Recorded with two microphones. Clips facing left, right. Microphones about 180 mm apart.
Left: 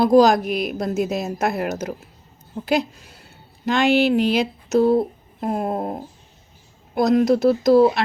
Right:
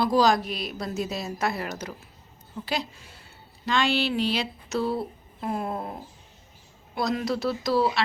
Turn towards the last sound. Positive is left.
turn(degrees=50)  # may be behind; listen again after turning